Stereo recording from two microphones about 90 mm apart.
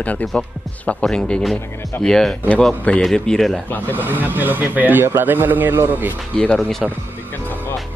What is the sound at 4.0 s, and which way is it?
Speech, 20° right (ahead or behind).